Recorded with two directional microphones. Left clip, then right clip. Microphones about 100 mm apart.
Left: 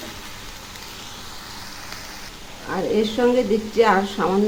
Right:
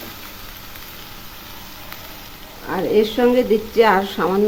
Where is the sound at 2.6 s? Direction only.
20° right (ahead or behind).